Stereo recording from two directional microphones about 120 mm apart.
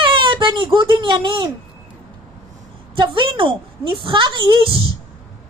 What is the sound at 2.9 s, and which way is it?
A woman's voice, 40° right (ahead or behind).